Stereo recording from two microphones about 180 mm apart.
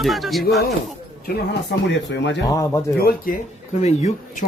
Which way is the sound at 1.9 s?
75° left (ahead or behind).